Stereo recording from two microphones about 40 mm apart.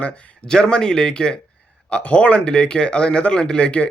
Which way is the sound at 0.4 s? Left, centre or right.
Centre.